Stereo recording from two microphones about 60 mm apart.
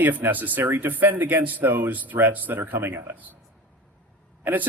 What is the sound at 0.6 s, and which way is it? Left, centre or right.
Speech, right.